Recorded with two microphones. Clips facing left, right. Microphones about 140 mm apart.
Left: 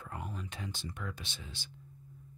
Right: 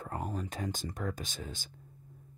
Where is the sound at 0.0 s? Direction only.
40° right (ahead or behind).